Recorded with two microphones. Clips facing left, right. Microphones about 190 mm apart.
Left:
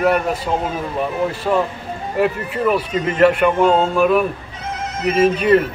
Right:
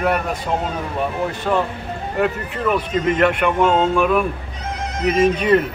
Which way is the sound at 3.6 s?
40° left (ahead or behind).